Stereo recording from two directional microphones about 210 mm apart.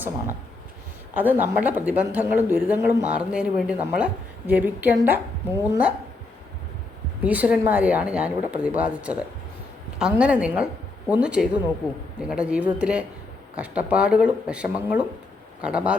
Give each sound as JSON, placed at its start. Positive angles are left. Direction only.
{"t": 1.1, "sound": "speech", "side_deg": -10}
{"t": 7.2, "sound": "speech", "side_deg": -5}